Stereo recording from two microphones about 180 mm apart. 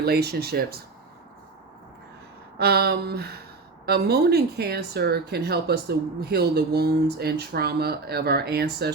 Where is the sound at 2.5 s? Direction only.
60° right (ahead or behind).